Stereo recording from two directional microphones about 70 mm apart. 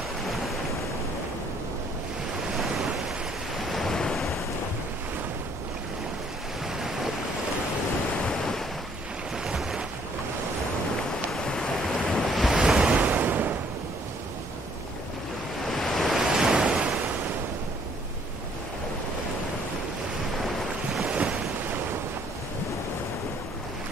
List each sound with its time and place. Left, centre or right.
2.5 s waves: centre
8.3 s waves: centre
9.6 s waves: centre
11.3 s waves: centre
12.5 s waves: centre
15.7 s waves: centre
21.1 s waves: centre